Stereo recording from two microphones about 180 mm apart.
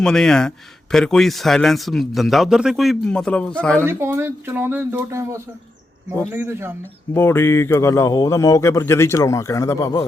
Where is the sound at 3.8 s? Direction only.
15° right (ahead or behind).